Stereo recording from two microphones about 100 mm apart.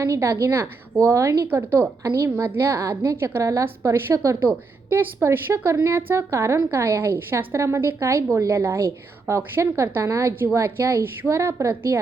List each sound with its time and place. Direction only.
0.0 s a woman's voice: 30° right (ahead or behind)